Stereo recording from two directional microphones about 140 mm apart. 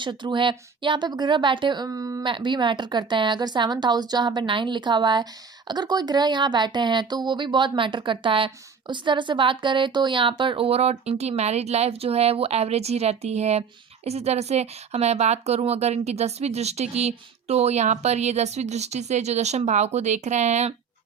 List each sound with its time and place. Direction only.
0.0 s a woman's voice: 35° right (ahead or behind)
2.2 s a woman's voice: 35° right (ahead or behind); by 20.7 s 55° right (ahead or behind)